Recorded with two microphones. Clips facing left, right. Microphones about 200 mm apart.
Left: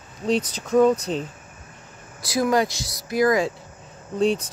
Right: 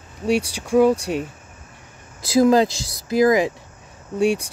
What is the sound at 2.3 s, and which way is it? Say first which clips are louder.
Speech: right 6 dB; 25° right (ahead or behind).